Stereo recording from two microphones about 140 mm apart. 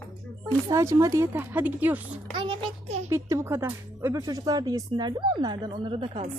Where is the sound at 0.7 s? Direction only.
20° right (ahead or behind).